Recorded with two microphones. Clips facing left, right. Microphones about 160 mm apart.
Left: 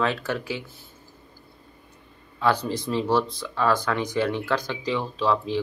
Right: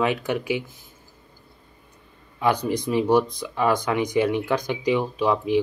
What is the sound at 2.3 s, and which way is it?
Speech, 15° right (ahead or behind).